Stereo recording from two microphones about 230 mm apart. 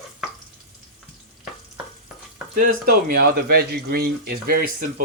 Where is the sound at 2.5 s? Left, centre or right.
Right.